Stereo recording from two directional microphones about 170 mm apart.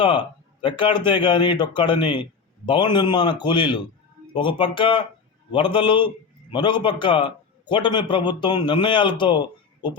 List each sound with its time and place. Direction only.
0.6 s a man's voice: 30° left (ahead or behind)